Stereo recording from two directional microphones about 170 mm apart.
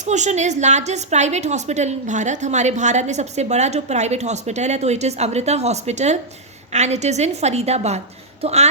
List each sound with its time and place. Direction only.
0.0 s a woman's voice: 45° right (ahead or behind)